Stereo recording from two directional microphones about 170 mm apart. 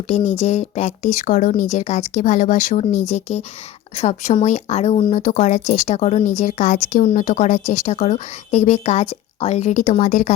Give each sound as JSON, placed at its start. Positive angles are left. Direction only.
{"t": 0.1, "sound": "speech", "side_deg": 40}